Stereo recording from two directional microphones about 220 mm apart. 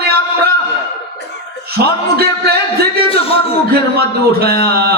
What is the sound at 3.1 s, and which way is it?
Speech, 25° left (ahead or behind).